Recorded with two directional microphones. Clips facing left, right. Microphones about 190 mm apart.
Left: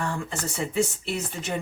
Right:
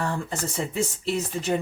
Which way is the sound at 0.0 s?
35° right (ahead or behind).